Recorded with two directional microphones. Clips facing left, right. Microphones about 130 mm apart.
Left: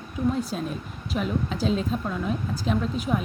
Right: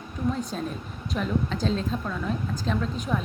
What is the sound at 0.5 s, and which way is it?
A woman's voice, 5° left (ahead or behind).